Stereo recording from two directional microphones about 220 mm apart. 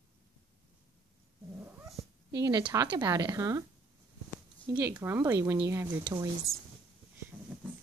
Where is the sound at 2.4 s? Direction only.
20° right (ahead or behind).